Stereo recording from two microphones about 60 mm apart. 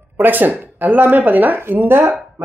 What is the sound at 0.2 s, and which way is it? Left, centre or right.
Speech, right.